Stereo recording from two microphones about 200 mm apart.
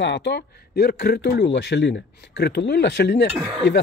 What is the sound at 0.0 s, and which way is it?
A man's voice, 60° left (ahead or behind).